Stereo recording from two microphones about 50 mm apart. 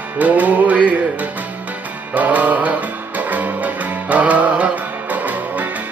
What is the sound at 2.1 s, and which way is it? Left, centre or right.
Mantra, right.